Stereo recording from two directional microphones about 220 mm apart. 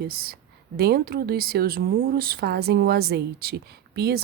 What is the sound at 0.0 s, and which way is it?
Speech, 45° right (ahead or behind).